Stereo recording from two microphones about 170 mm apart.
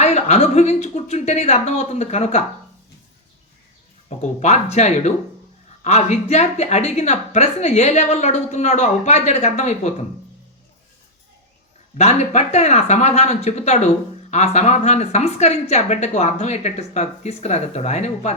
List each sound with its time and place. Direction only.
0.0 s speech: 40° left (ahead or behind)
4.2 s speech: 40° left (ahead or behind)
11.9 s speech: 40° left (ahead or behind)